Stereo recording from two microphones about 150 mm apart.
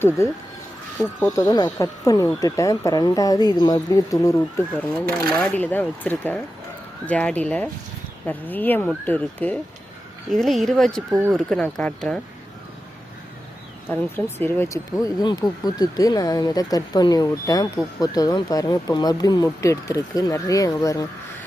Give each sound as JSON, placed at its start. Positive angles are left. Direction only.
{"t": 0.2, "sound": "speech", "side_deg": 20}
{"t": 13.9, "sound": "speech", "side_deg": 15}